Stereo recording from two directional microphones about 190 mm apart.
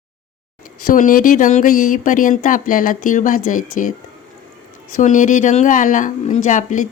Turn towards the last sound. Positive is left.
turn(degrees=40)  # may be behind; listen again after turning